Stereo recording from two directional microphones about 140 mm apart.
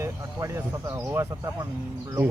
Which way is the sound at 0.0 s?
20° right (ahead or behind).